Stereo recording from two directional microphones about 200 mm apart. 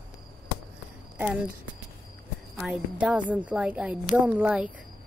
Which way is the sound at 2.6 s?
5° right (ahead or behind).